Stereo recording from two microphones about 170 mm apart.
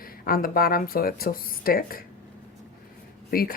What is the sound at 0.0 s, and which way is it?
Speech, 60° left (ahead or behind).